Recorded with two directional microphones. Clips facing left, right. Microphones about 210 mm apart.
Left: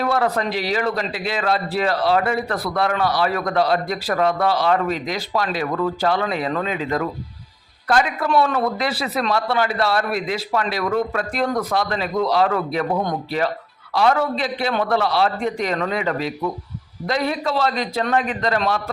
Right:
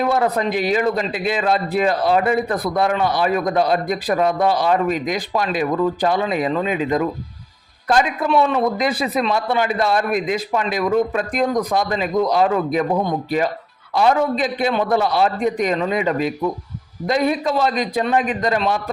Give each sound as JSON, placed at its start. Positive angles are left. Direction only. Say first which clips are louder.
{"t": 0.0, "sound": "a man's voice", "louder": "right 2 dB", "side_deg": -20}